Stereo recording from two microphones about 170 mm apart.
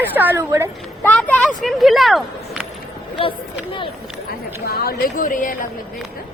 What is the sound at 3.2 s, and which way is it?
Speech, 30° left (ahead or behind).